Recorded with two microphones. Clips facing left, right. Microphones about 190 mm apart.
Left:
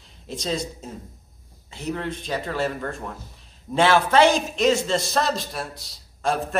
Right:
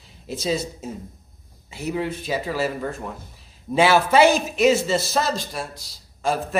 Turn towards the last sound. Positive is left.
turn(degrees=0)  # may be behind; listen again after turning